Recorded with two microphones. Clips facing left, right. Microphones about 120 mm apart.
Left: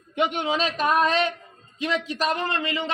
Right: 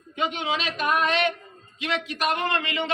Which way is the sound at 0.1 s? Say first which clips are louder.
Left 4 dB; 65° left (ahead or behind).